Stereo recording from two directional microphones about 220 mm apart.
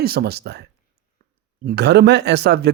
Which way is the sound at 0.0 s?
45° right (ahead or behind).